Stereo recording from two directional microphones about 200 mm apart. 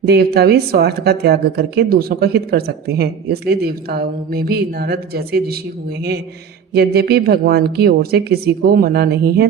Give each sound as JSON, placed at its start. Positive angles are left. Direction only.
{"t": 0.0, "sound": "a woman's voice", "side_deg": -55}
{"t": 6.7, "sound": "a woman's voice", "side_deg": -50}